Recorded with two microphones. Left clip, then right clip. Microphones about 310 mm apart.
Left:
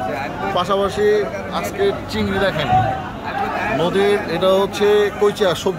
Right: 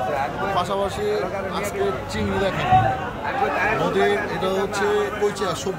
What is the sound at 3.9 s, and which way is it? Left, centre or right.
Speech, centre.